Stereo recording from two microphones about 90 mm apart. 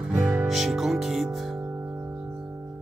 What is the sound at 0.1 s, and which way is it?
Music, 25° right (ahead or behind).